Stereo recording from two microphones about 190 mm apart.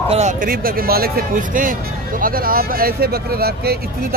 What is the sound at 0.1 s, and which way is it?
Speech, 40° right (ahead or behind).